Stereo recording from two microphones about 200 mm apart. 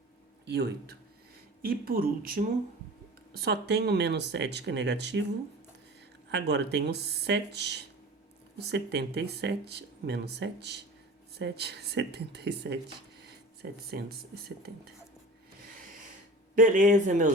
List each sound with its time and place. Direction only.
0.4 s speech: 55° right (ahead or behind)
3.3 s speech: 55° right (ahead or behind)
6.3 s speech: 60° right (ahead or behind)
16.6 s speech: 40° right (ahead or behind)